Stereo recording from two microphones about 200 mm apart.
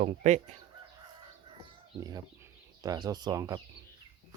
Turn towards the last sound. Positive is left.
turn(degrees=-20)  # may be behind; listen again after turning